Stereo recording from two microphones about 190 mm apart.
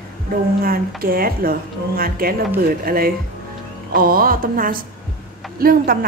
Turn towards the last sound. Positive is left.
turn(degrees=-50)  # may be behind; listen again after turning